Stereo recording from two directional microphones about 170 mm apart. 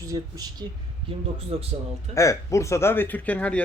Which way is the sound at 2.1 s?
20° left (ahead or behind).